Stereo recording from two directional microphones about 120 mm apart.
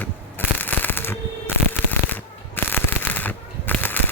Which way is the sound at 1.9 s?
15° left (ahead or behind).